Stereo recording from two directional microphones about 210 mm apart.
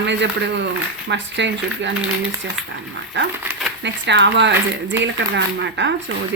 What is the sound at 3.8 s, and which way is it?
Speech, 55° right (ahead or behind).